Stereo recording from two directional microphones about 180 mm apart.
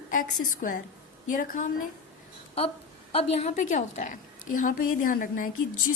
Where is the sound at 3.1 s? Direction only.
35° left (ahead or behind).